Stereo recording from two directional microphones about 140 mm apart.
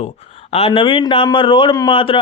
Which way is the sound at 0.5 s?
40° left (ahead or behind).